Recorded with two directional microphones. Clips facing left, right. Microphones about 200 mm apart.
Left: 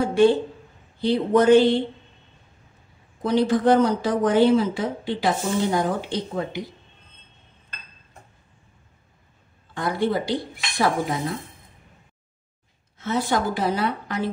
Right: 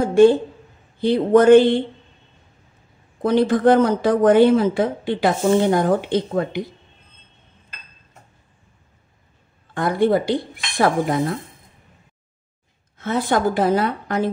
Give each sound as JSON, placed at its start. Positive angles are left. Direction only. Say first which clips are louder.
{"t": 0.0, "sound": "a woman's voice", "louder": "right 5 dB", "side_deg": -45}
{"t": 3.2, "sound": "speech", "louder": "right 3 dB", "side_deg": -55}
{"t": 9.8, "sound": "a woman's voice", "louder": "right 6 dB", "side_deg": -55}
{"t": 12.9, "sound": "a woman's voice", "louder": "right 3 dB", "side_deg": -55}